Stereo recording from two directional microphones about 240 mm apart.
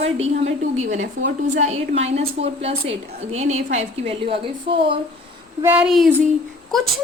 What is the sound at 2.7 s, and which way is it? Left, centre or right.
Speech, right.